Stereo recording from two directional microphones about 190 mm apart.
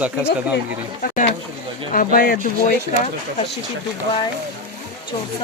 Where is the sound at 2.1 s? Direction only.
50° left (ahead or behind).